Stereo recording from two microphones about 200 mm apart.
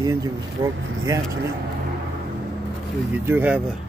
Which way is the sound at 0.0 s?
15° right (ahead or behind).